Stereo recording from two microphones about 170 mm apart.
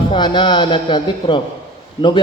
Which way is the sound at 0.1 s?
25° left (ahead or behind).